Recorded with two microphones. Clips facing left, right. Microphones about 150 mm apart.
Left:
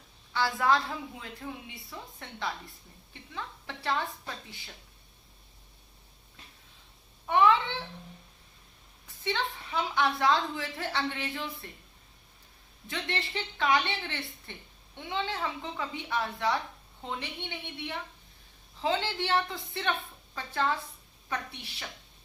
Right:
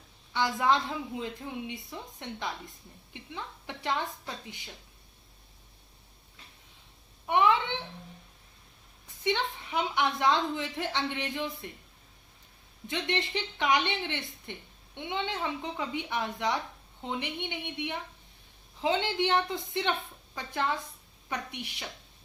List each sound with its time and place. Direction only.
0.3 s a woman's voice: 20° right (ahead or behind)
7.3 s speech: 20° right (ahead or behind)
9.2 s a woman's voice: 15° right (ahead or behind)
12.9 s a woman's voice: 20° right (ahead or behind)